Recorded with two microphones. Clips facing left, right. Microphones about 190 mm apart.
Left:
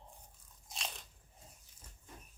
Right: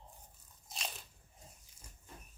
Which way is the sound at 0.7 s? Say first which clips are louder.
Right 1 dB; centre (ahead or behind).